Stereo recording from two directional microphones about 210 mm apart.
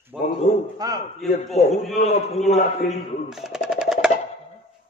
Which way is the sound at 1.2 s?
Centre (ahead or behind).